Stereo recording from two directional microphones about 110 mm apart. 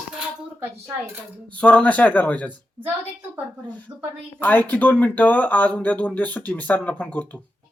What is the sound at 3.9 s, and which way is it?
Speech, 40° right (ahead or behind).